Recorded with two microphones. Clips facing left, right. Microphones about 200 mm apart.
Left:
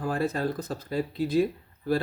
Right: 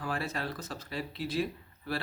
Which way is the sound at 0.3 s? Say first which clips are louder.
Left 8 dB; 45° left (ahead or behind).